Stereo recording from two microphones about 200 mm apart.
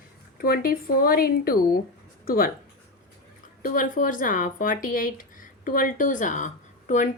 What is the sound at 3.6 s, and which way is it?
Speech, 45° left (ahead or behind).